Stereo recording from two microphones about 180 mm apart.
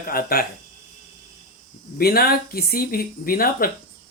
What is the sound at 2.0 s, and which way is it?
Speech, 60° left (ahead or behind).